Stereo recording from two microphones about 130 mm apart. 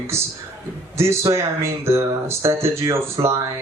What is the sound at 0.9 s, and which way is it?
A man's voice, 20° right (ahead or behind).